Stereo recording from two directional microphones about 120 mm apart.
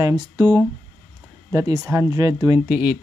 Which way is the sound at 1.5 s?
30° right (ahead or behind).